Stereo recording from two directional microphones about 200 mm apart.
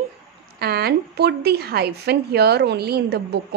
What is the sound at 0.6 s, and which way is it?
Speech, 55° right (ahead or behind).